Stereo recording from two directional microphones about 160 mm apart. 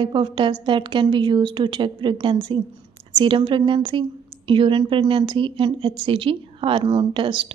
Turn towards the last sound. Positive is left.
turn(degrees=-30)  # may be behind; listen again after turning